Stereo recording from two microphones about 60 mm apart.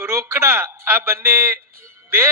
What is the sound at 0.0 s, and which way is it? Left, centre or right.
A man's voice, right.